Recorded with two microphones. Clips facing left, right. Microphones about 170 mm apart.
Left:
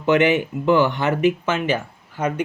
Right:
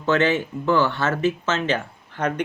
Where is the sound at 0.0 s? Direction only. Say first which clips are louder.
Left 3 dB; 15° left (ahead or behind).